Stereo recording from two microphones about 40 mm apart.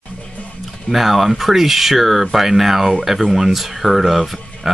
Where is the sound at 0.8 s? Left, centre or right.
Centre.